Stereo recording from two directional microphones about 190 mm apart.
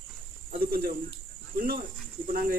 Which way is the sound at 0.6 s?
50° right (ahead or behind).